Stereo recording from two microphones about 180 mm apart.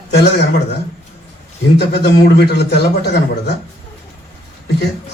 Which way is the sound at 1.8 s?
70° left (ahead or behind).